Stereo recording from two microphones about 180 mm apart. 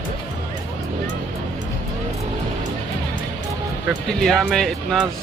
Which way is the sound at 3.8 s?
Centre (ahead or behind).